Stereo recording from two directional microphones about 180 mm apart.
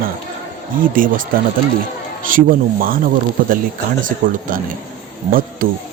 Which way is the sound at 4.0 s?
50° right (ahead or behind).